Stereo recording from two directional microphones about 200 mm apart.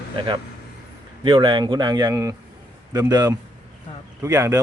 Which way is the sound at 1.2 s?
25° right (ahead or behind).